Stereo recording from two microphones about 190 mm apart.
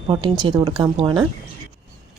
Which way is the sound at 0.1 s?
25° right (ahead or behind).